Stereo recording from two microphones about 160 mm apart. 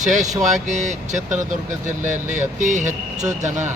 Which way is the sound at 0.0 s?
50° right (ahead or behind).